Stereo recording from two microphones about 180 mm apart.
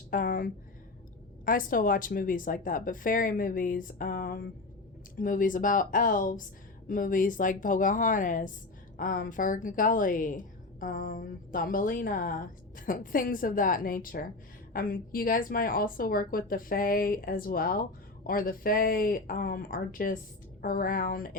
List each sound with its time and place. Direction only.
0.1 s a woman's voice: 50° left (ahead or behind)